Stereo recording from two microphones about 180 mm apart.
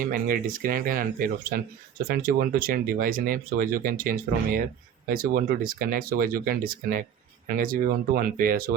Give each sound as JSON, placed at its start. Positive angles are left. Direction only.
{"t": 0.0, "sound": "speech", "side_deg": -50}